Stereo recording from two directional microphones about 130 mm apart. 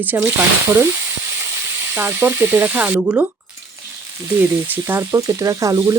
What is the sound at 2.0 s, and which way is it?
Speech, 15° right (ahead or behind).